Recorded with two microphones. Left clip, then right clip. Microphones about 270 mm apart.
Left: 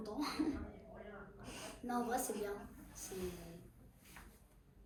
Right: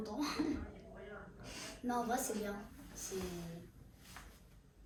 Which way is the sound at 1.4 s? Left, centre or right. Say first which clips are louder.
Right 3 dB; centre.